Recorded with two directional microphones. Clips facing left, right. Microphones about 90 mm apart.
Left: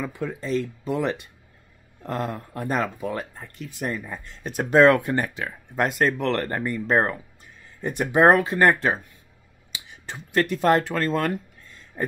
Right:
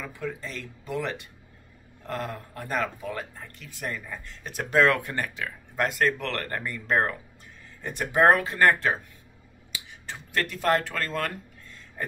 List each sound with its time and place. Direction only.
0.0 s speech: 20° left (ahead or behind)